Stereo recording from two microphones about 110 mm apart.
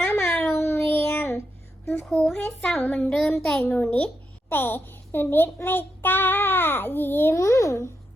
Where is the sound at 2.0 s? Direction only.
5° left (ahead or behind).